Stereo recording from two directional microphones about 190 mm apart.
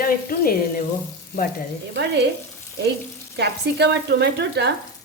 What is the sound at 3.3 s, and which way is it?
Speech, 60° right (ahead or behind).